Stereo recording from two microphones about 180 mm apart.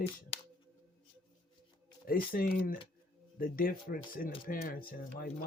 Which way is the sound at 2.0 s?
55° left (ahead or behind).